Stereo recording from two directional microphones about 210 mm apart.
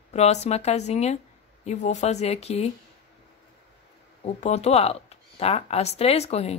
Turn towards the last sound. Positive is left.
turn(degrees=30)  # may be behind; listen again after turning